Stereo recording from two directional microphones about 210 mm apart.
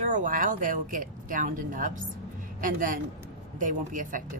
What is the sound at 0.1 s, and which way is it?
A woman's voice, 40° right (ahead or behind).